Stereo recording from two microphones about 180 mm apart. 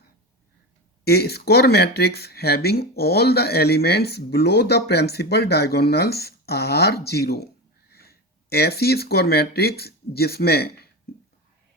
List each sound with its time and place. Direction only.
1.0 s speech: 60° left (ahead or behind)